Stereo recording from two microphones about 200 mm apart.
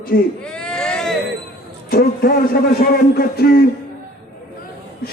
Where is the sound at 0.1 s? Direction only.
50° left (ahead or behind).